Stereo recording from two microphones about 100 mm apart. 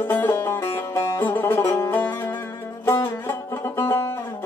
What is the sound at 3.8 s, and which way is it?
Music, 25° left (ahead or behind).